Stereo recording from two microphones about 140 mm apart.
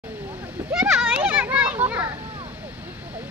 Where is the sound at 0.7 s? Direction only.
5° right (ahead or behind).